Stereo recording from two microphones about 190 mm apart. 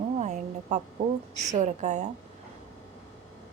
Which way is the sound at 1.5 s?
40° right (ahead or behind).